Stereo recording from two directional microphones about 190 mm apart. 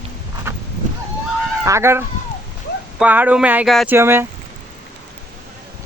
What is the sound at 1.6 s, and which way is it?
Speech, 15° right (ahead or behind).